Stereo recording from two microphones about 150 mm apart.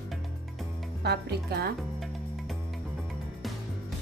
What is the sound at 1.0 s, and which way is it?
Speech, 90° right.